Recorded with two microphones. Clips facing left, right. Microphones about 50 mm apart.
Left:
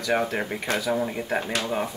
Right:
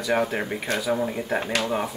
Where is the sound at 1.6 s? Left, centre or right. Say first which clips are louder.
Right 1 dB; centre.